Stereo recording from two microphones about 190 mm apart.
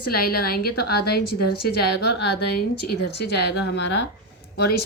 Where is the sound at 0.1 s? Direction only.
55° left (ahead or behind).